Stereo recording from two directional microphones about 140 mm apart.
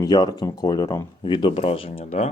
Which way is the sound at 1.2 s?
35° left (ahead or behind).